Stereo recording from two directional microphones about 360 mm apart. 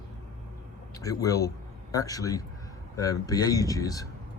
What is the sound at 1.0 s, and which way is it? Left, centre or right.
Speech, centre.